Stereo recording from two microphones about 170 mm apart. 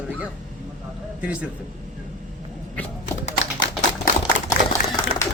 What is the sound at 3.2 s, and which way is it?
Tap, 90° left.